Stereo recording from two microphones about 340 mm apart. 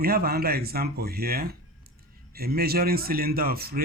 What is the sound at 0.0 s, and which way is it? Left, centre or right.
A man's voice, right.